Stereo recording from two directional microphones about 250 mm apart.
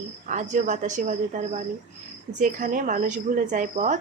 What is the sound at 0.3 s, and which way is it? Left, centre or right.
A woman's voice, right.